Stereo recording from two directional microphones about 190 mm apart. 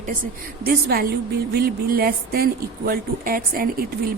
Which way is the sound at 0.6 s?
50° right (ahead or behind).